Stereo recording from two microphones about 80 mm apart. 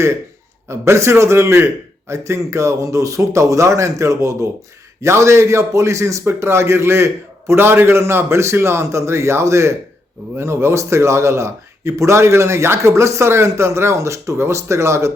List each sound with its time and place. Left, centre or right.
0.7 s a man's voice: right